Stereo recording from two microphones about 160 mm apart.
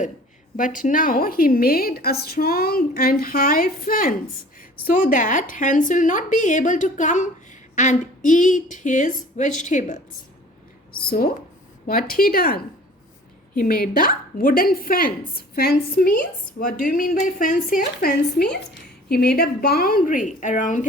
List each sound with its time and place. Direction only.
0.5 s a woman's voice: 55° left (ahead or behind)
11.0 s a woman's voice: 65° left (ahead or behind)
18.5 s a woman's voice: 80° left; by 20.8 s 50° left (ahead or behind)